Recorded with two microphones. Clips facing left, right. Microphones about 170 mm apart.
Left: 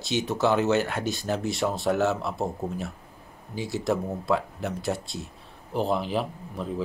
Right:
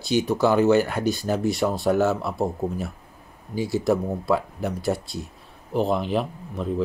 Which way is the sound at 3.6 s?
Centre (ahead or behind).